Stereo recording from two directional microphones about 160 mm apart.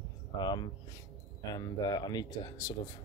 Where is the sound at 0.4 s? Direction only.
25° left (ahead or behind).